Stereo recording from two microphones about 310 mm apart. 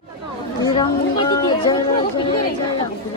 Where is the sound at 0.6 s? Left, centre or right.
Centre.